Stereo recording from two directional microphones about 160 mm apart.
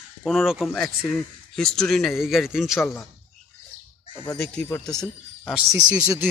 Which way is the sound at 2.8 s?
15° left (ahead or behind).